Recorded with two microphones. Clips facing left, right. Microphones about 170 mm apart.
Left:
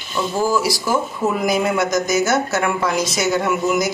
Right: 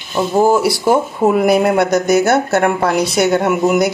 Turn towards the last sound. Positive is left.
turn(degrees=-55)  # may be behind; listen again after turning